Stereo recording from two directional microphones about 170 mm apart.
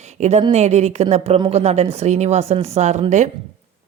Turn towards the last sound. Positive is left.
turn(degrees=-45)  # may be behind; listen again after turning